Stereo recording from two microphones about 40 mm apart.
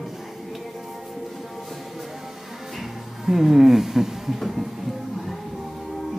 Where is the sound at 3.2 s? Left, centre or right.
Centre.